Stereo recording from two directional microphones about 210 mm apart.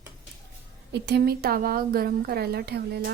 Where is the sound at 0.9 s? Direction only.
50° right (ahead or behind).